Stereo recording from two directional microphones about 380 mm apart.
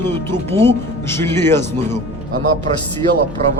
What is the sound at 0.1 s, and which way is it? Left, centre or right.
Speech, centre.